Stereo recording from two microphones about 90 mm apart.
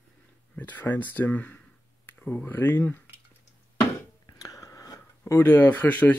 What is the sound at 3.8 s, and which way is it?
Speech, 45° left (ahead or behind).